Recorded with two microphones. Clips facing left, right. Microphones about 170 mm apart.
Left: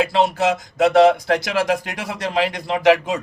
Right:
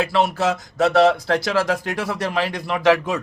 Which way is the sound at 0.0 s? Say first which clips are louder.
Left 2 dB; 20° left (ahead or behind).